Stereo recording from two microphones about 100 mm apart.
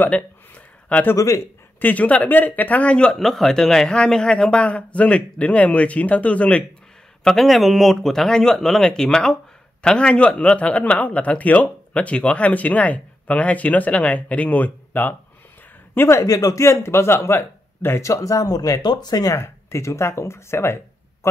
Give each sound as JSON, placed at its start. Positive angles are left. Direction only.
{"t": 0.8, "sound": "speech", "side_deg": 15}
{"t": 1.1, "sound": "speech", "side_deg": 30}
{"t": 1.8, "sound": "speech", "side_deg": 15}
{"t": 7.2, "sound": "speech", "side_deg": 0}
{"t": 16.2, "sound": "speech", "side_deg": 35}
{"t": 19.3, "sound": "speech", "side_deg": 25}